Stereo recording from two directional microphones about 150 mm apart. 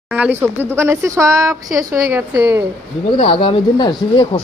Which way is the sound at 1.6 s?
Centre (ahead or behind).